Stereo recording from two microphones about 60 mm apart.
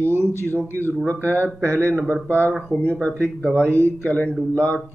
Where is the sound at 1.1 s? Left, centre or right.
Left.